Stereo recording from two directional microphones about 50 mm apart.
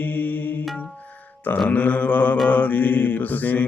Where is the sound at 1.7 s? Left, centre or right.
Left.